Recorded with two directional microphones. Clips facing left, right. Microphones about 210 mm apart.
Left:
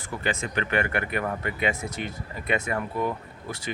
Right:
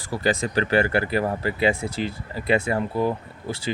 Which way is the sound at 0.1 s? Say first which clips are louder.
Right 6 dB; 35° right (ahead or behind).